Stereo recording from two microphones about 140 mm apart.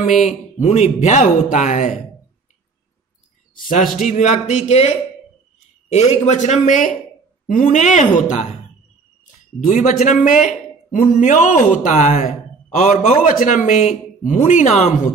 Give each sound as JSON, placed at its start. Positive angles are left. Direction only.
{"t": 0.6, "sound": "speech", "side_deg": 55}
{"t": 3.5, "sound": "speech", "side_deg": 75}
{"t": 4.0, "sound": "speech", "side_deg": 60}
{"t": 9.7, "sound": "speech", "side_deg": 65}
{"t": 12.1, "sound": "speech", "side_deg": 50}
{"t": 13.2, "sound": "speech", "side_deg": 70}